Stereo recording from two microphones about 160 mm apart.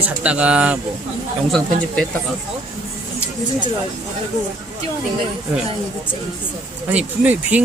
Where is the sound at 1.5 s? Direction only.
5° left (ahead or behind).